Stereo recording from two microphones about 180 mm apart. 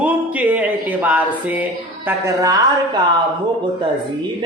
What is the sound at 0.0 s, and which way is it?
Music, 10° right (ahead or behind).